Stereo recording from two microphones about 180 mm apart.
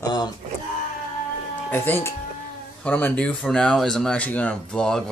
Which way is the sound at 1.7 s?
15° left (ahead or behind).